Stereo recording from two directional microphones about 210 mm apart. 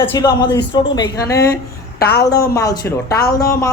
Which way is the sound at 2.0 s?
50° left (ahead or behind).